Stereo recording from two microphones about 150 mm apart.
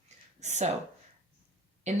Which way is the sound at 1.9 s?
50° right (ahead or behind).